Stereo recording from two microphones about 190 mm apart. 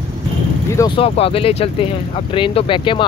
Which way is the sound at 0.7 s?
25° left (ahead or behind).